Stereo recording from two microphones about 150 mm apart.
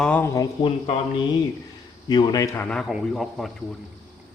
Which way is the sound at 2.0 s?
25° left (ahead or behind).